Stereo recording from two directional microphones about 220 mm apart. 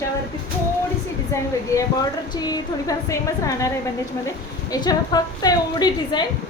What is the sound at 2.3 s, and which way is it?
A woman's voice, 15° left (ahead or behind).